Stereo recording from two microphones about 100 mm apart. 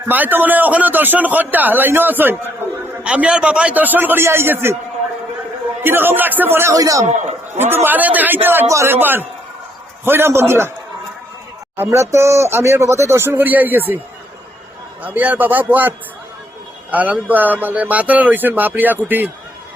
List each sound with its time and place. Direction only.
0.1 s speech: 20° right (ahead or behind)
5.8 s speech: 20° right (ahead or behind)
6.7 s a man's voice: 35° right (ahead or behind)
7.6 s speech: 20° right (ahead or behind)
11.8 s speech: 25° right (ahead or behind)
15.0 s speech: 15° right (ahead or behind)